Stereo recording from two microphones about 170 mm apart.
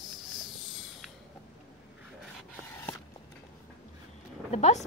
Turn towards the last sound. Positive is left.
turn(degrees=40)  # may be behind; listen again after turning